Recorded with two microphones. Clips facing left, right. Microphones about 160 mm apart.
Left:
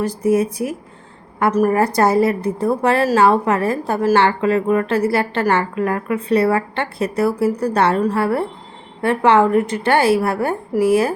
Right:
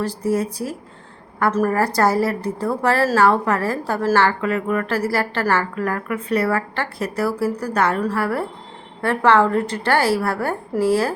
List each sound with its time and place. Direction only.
0.0 s a woman's voice: 20° left (ahead or behind)